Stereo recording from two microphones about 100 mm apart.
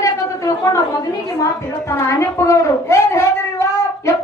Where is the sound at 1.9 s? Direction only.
30° left (ahead or behind).